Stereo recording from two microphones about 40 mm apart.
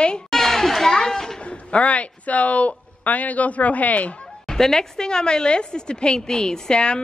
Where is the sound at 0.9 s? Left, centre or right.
Centre.